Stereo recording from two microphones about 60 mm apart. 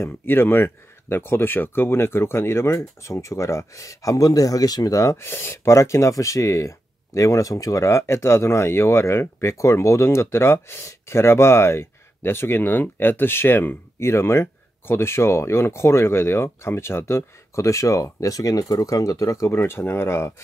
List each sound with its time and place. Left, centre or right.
0.0 s speech: left
5.1 s speech: left
5.7 s speech: left